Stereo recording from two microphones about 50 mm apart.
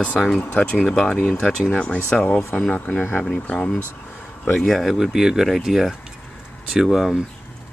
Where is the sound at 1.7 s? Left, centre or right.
Left.